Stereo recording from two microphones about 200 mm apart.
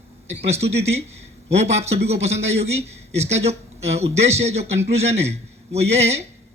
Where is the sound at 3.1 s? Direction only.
30° right (ahead or behind).